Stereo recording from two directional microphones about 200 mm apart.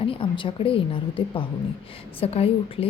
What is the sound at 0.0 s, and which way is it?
A woman's voice, 25° left (ahead or behind).